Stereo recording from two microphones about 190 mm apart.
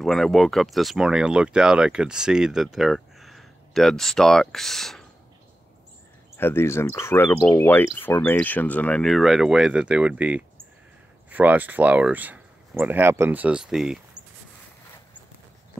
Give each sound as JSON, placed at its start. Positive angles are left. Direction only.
{"t": 0.0, "sound": "speech", "side_deg": 0}
{"t": 6.3, "sound": "speech", "side_deg": 10}